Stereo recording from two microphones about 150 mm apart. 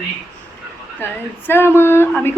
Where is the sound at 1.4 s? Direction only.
15° left (ahead or behind).